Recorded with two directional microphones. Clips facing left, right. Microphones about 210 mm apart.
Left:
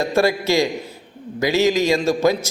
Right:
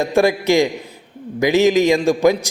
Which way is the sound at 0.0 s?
15° right (ahead or behind).